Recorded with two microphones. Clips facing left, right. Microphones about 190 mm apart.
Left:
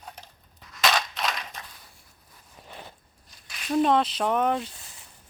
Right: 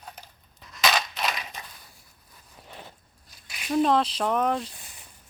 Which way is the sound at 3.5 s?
10° right (ahead or behind).